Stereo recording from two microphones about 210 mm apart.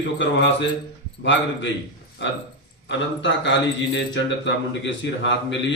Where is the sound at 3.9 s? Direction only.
60° left (ahead or behind).